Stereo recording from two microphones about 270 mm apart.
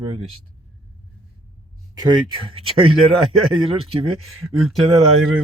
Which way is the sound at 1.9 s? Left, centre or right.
Centre.